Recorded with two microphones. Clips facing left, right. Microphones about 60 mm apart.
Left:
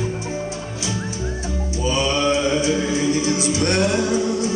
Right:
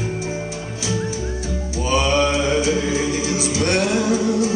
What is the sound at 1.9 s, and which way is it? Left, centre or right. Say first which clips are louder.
Music: right 2 dB; right.